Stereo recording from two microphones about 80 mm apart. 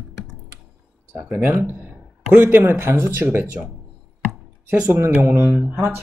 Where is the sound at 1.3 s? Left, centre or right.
Right.